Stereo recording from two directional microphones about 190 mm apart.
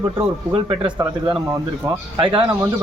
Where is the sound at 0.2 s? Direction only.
25° right (ahead or behind).